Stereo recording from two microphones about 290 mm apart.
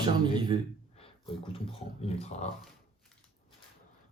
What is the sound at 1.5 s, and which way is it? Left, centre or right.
Speech, centre.